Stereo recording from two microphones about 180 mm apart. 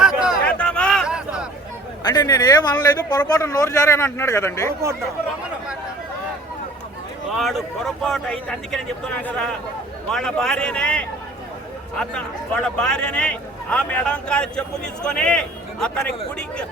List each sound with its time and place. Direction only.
0.0 s a sound: 5° right (ahead or behind)
2.0 s speech: 20° left (ahead or behind)
7.3 s speech: centre (ahead or behind)